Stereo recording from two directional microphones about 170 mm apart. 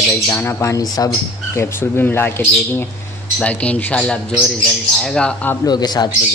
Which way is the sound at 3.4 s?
10° left (ahead or behind).